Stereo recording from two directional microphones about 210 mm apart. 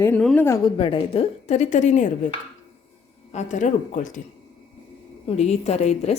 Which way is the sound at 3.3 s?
35° left (ahead or behind).